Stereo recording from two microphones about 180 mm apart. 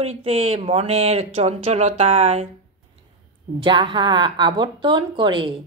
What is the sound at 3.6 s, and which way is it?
Speech, 25° right (ahead or behind).